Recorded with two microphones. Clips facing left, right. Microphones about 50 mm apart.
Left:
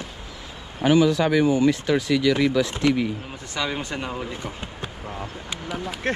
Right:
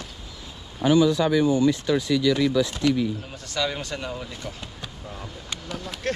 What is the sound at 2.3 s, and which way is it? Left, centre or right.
Speech, left.